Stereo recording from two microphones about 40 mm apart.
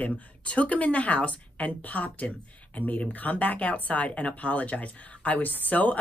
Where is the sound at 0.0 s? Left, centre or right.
Left.